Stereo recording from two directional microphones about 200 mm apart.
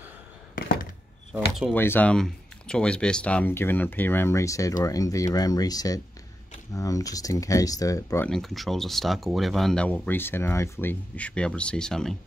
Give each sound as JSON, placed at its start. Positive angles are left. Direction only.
{"t": 1.7, "sound": "speech", "side_deg": 10}
{"t": 8.3, "sound": "speech", "side_deg": 0}